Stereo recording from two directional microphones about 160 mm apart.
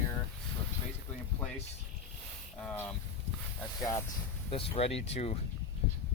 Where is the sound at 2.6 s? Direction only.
10° left (ahead or behind).